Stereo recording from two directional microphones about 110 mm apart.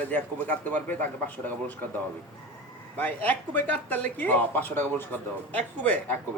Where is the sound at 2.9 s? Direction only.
15° left (ahead or behind).